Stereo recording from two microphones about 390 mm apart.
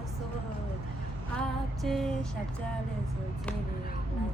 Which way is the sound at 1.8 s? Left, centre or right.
Centre.